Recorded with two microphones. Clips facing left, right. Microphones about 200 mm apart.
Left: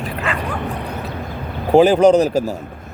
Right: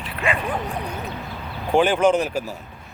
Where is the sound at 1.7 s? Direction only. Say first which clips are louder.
Left 7 dB; 35° left (ahead or behind).